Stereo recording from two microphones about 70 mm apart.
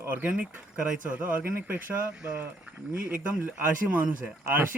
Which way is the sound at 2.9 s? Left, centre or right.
Right.